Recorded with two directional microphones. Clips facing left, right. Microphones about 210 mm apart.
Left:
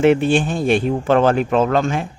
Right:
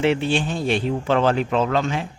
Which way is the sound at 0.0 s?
50° left (ahead or behind).